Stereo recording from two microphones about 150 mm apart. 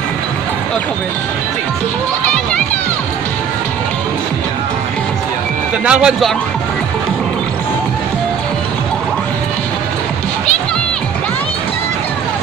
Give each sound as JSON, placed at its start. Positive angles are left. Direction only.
{"t": 5.9, "sound": "speech", "side_deg": -5}